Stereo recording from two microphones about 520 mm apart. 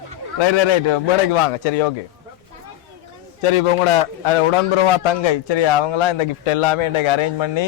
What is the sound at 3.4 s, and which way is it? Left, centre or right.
A man's voice, left.